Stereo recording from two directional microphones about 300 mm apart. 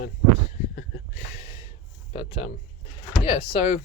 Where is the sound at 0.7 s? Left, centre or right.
Left.